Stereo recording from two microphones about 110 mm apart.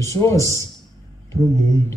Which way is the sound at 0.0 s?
25° left (ahead or behind).